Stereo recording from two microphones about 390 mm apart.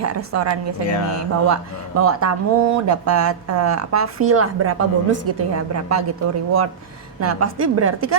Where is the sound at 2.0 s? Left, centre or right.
Right.